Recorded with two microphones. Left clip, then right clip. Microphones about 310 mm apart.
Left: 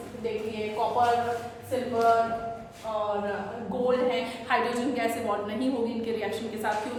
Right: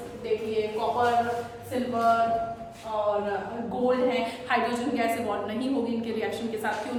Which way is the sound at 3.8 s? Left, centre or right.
Centre.